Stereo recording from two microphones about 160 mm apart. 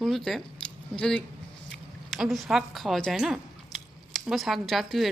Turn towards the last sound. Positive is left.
turn(degrees=0)  # may be behind; listen again after turning